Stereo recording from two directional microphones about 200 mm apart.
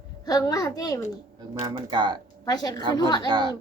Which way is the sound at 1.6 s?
20° right (ahead or behind).